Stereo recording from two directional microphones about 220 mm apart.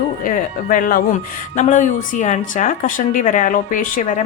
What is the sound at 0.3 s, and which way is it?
Speech, 40° left (ahead or behind).